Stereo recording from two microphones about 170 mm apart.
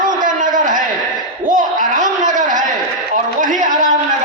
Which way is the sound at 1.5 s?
50° right (ahead or behind).